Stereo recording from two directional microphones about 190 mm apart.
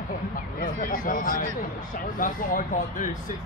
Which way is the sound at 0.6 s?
45° left (ahead or behind).